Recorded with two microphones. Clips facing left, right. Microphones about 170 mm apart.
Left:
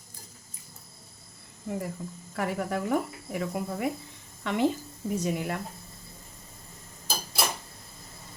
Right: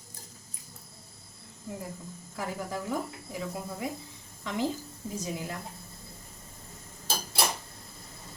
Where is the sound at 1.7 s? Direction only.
65° left (ahead or behind).